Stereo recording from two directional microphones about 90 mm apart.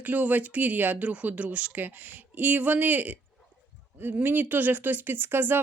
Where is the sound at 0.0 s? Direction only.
20° right (ahead or behind).